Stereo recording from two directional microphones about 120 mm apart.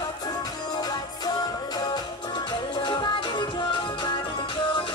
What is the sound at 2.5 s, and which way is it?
Music, 40° left (ahead or behind).